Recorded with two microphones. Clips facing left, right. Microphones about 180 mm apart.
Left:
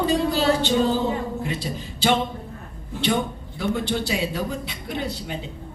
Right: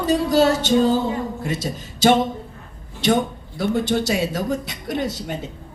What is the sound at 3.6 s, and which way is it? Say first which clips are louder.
Speech: right 4 dB; 40° right (ahead or behind).